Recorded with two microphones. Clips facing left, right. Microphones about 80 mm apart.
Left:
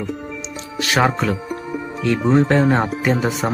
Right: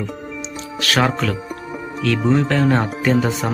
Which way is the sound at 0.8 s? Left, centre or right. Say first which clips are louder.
Left 1 dB; centre.